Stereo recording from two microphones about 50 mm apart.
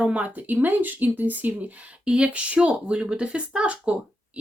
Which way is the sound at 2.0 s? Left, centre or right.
Centre.